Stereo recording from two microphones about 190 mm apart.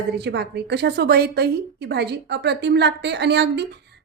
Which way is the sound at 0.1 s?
60° right (ahead or behind).